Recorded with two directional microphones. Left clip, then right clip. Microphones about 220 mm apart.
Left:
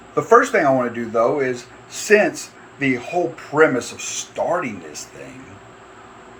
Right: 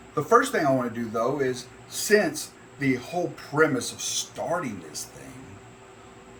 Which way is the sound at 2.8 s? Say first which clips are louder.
Left 6 dB; 90° right.